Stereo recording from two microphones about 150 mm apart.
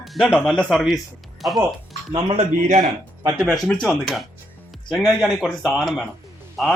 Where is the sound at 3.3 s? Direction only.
Centre (ahead or behind).